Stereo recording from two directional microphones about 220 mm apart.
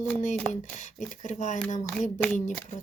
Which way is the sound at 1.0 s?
35° left (ahead or behind).